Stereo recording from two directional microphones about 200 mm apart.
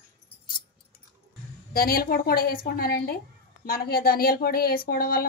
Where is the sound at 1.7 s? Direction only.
50° left (ahead or behind).